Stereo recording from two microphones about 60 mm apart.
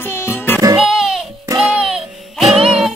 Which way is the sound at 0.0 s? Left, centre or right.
Left.